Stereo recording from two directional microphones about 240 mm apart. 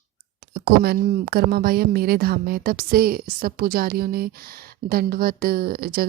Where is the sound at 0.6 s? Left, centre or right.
Right.